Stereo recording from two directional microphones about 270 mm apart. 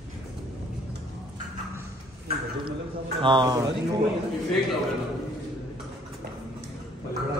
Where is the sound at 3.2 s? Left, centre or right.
Centre.